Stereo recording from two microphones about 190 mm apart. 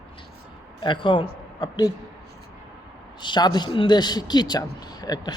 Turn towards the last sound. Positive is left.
turn(degrees=20)  # may be behind; listen again after turning